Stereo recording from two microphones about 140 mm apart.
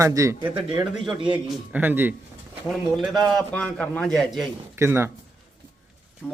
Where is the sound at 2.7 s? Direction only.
Centre (ahead or behind).